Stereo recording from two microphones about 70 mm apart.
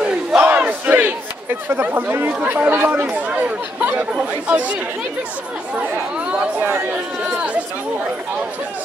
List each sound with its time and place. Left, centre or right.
0.0 s crowd: centre
0.4 s battle cry: right
2.4 s speech: right
6.6 s speech: right
7.2 s speech: centre